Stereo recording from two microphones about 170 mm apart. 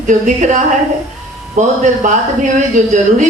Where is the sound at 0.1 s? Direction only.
45° right (ahead or behind).